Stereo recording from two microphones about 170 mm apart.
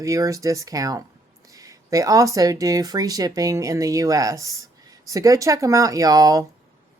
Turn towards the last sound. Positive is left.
turn(degrees=-20)  # may be behind; listen again after turning